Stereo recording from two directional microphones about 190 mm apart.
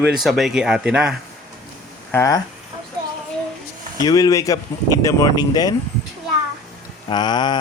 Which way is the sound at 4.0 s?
20° left (ahead or behind).